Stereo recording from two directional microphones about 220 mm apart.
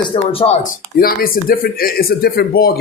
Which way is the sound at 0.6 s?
40° left (ahead or behind).